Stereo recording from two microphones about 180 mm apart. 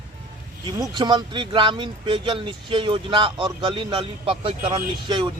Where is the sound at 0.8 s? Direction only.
25° right (ahead or behind).